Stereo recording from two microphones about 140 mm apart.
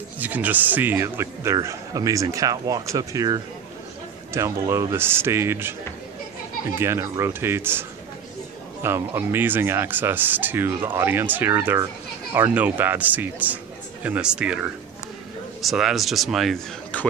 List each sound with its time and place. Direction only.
0.2 s a man's voice: 10° right (ahead or behind)
8.8 s speech: 15° right (ahead or behind)
15.6 s speech: centre (ahead or behind)
16.9 s speech: 10° left (ahead or behind)